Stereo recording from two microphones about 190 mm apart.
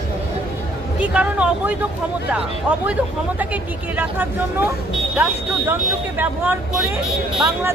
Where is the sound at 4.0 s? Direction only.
10° right (ahead or behind).